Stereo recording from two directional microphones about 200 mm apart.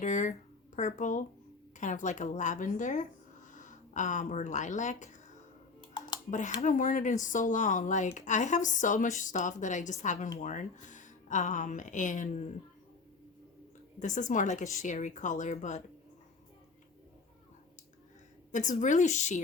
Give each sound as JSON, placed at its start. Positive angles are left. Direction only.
{"t": 0.0, "sound": "speech", "side_deg": 40}
{"t": 5.8, "sound": "a sound", "side_deg": 20}
{"t": 6.6, "sound": "a woman's voice", "side_deg": 40}
{"t": 14.0, "sound": "speech", "side_deg": 40}
{"t": 18.5, "sound": "speech", "side_deg": 40}